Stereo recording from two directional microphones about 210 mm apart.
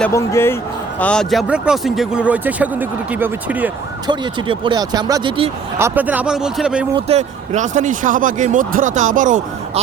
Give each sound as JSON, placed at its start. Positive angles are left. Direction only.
{"t": 0.0, "sound": "a man's voice", "side_deg": 15}
{"t": 4.0, "sound": "speech", "side_deg": -20}
{"t": 5.8, "sound": "speech", "side_deg": -10}
{"t": 6.9, "sound": "speech", "side_deg": -30}